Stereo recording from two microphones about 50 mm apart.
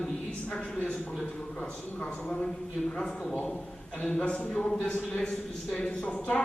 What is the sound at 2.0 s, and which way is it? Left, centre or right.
Speech, left.